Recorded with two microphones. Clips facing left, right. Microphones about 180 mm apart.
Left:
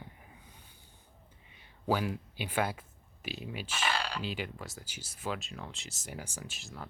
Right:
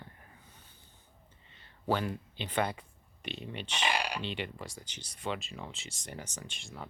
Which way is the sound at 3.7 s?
20° right (ahead or behind).